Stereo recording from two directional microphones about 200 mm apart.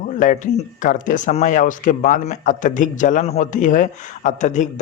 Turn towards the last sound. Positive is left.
turn(degrees=35)  # may be behind; listen again after turning